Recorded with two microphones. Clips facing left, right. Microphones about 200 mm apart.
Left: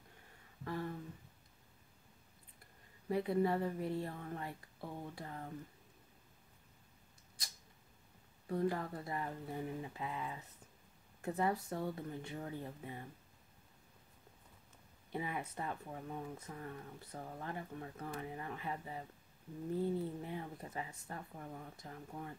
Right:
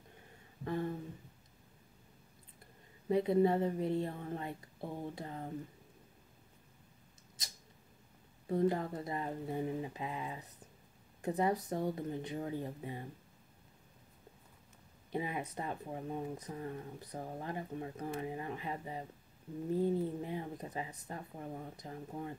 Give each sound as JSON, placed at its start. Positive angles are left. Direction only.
{"t": 0.7, "sound": "a woman's voice", "side_deg": -25}
{"t": 3.1, "sound": "a woman's voice", "side_deg": -20}
{"t": 8.5, "sound": "a woman's voice", "side_deg": -20}
{"t": 15.1, "sound": "a woman's voice", "side_deg": -20}